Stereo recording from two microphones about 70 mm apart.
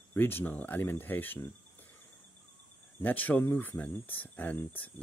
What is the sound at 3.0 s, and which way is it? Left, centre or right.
Speech, left.